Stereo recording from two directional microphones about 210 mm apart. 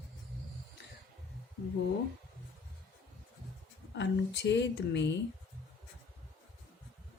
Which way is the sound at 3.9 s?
55° left (ahead or behind).